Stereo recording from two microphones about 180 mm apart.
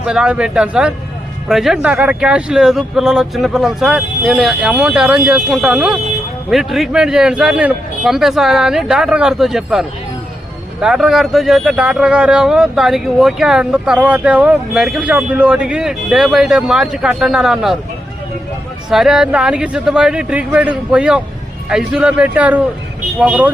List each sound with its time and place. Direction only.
0.0 s speech: 5° right (ahead or behind)
18.9 s speech: centre (ahead or behind)